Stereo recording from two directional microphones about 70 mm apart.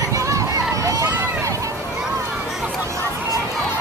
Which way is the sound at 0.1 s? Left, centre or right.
Right.